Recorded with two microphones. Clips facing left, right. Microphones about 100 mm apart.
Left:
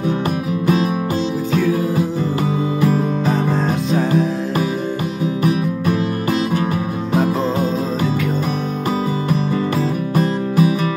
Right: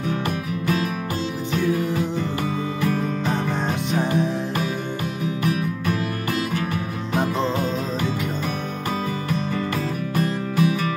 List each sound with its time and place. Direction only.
5.4 s music: 20° left (ahead or behind)
9.8 s music: 30° left (ahead or behind)
10.5 s music: 15° left (ahead or behind)